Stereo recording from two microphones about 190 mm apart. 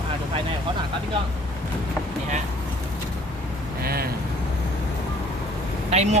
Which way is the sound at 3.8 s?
55° right (ahead or behind).